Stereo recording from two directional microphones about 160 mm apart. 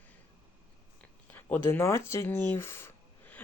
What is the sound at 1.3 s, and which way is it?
Speech, 10° left (ahead or behind).